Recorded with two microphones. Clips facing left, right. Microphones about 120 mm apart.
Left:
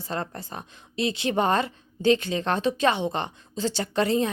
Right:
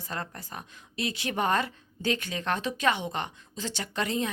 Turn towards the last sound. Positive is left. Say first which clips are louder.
# left 7 dB
turn(degrees=35)  # may be behind; listen again after turning